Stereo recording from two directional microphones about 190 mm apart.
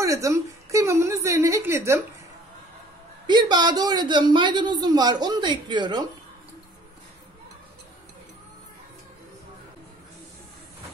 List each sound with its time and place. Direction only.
0.0 s a woman's voice: 15° right (ahead or behind)
3.3 s a woman's voice: 25° right (ahead or behind)